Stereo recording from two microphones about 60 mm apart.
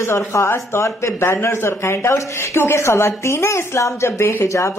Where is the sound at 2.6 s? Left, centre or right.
Left.